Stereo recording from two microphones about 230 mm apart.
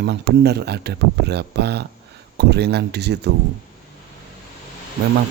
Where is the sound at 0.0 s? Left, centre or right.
Right.